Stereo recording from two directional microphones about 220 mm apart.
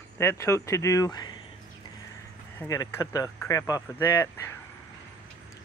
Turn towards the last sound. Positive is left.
turn(degrees=15)  # may be behind; listen again after turning